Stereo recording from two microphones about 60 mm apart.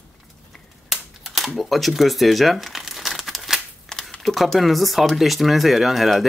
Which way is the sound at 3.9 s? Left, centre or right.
Centre.